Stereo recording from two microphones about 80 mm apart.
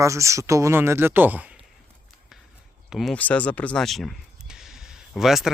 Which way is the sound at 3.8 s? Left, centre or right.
Centre.